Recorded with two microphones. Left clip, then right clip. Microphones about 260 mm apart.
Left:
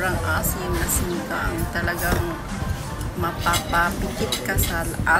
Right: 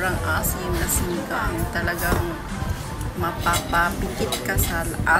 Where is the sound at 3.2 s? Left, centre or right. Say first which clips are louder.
Even; centre.